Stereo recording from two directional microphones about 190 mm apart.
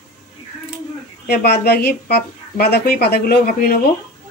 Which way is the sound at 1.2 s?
60° left (ahead or behind).